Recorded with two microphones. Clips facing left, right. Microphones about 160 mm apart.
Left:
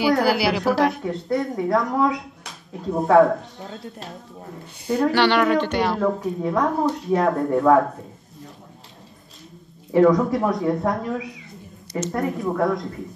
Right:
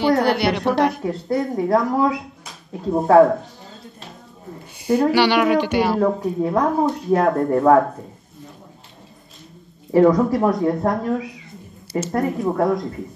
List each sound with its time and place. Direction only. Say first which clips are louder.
0.1 s a woman's voice: right 1 dB; 5° left (ahead or behind)
9.9 s a woman's voice: right 2 dB; centre (ahead or behind)